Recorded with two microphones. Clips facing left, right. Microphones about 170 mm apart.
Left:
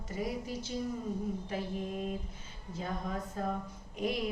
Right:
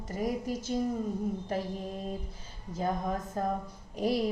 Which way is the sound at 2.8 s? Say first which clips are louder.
Right 6 dB; 45° right (ahead or behind).